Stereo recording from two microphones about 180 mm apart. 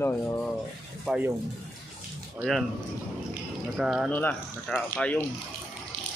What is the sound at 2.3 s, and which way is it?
Speech, centre (ahead or behind).